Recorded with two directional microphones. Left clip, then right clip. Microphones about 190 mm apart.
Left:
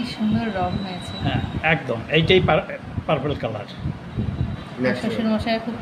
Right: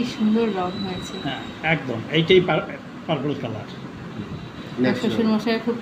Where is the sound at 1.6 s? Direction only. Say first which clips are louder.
Left 2 dB; 50° left (ahead or behind).